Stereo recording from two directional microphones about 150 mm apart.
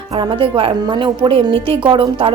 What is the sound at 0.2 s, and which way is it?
A woman's voice, 35° right (ahead or behind).